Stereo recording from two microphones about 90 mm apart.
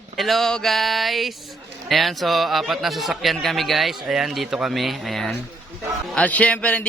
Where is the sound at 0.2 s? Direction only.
Centre (ahead or behind).